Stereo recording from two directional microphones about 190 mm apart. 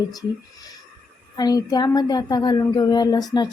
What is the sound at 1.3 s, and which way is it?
A woman's voice, 20° left (ahead or behind).